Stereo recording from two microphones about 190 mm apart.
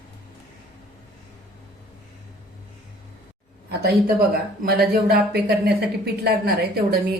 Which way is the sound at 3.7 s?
55° right (ahead or behind).